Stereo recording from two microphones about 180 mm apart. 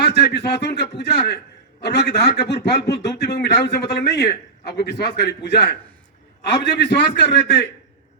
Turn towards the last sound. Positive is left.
turn(degrees=75)  # may be behind; listen again after turning